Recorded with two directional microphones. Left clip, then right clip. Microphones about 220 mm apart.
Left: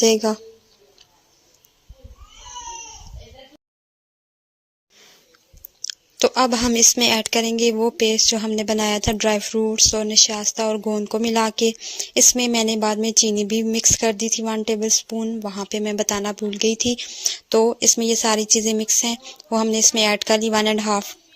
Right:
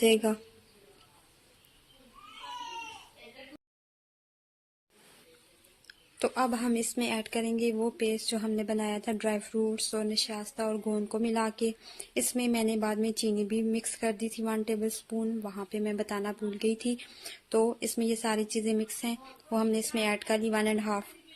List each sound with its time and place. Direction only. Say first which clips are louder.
0.0 s a woman's voice: left 8 dB; 30° left (ahead or behind)
5.9 s speech: left 13 dB; 35° left (ahead or behind)